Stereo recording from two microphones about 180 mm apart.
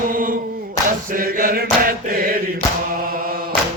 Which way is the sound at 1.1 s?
50° right (ahead or behind).